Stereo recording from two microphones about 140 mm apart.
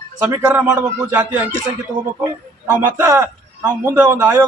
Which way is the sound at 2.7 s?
15° right (ahead or behind).